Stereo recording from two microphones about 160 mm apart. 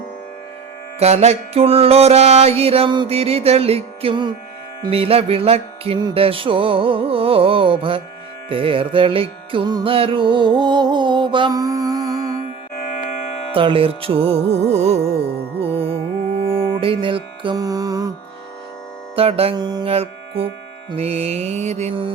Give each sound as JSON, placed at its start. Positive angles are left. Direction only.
{"t": 0.9, "sound": "mantra", "side_deg": -40}
{"t": 8.4, "sound": "music", "side_deg": -35}
{"t": 13.5, "sound": "mantra", "side_deg": -35}
{"t": 15.6, "sound": "music", "side_deg": -40}
{"t": 19.1, "sound": "mantra", "side_deg": -35}
{"t": 19.5, "sound": "music", "side_deg": -25}
{"t": 20.9, "sound": "mantra", "side_deg": -40}